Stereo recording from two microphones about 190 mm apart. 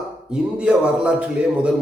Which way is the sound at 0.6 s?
5° right (ahead or behind).